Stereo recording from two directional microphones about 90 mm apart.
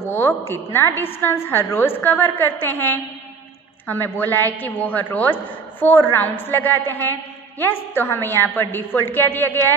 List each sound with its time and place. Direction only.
0.0 s a woman's voice: 25° left (ahead or behind)